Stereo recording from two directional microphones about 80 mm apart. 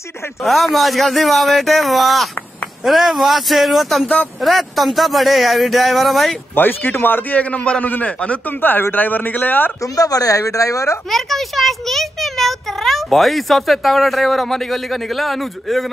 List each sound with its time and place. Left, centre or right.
0.4 s speech: centre
4.0 s a man's voice: centre
4.4 s speech: centre
6.5 s a man's voice: left
9.9 s a woman's voice: left
11.1 s a child's voice: centre